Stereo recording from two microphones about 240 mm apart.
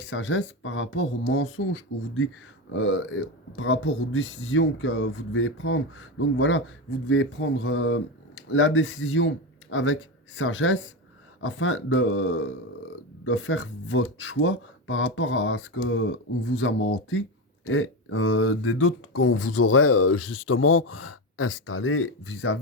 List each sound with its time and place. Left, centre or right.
0.0 s speech: left
20.0 s speech: left
21.3 s speech: left